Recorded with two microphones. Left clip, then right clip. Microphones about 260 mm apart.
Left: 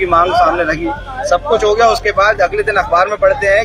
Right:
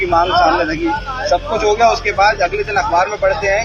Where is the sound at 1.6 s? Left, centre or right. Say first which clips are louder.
Right 1 dB; left.